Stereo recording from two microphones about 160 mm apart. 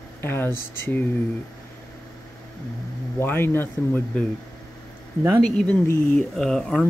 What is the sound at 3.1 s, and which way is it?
Speech, 15° left (ahead or behind).